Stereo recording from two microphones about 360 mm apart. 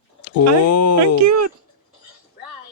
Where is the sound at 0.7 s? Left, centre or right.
Left.